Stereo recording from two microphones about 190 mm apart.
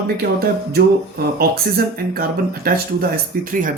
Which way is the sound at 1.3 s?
55° right (ahead or behind).